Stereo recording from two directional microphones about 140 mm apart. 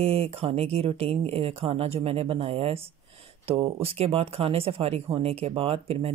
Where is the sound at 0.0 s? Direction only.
45° right (ahead or behind).